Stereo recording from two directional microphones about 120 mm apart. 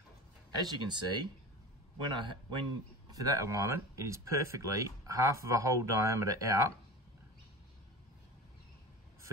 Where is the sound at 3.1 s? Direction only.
30° right (ahead or behind).